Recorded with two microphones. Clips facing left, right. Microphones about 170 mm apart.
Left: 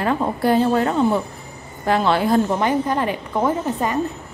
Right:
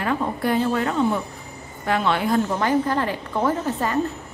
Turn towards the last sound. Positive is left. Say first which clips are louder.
# left 2 dB
turn(degrees=15)  # may be behind; listen again after turning